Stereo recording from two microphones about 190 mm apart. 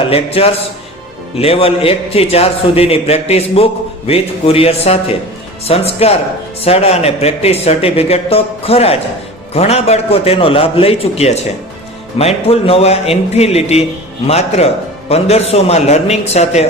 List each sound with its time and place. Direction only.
0.1 s a man's voice: 30° left (ahead or behind)